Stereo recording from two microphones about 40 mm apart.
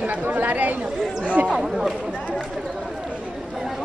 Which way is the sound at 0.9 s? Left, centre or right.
Centre.